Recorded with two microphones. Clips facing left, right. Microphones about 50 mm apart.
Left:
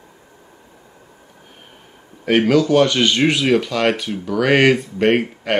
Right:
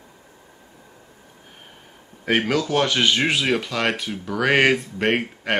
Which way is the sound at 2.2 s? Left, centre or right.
Centre.